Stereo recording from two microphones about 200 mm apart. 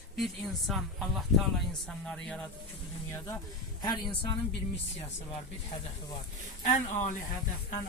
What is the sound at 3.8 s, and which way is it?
Speech, 20° left (ahead or behind).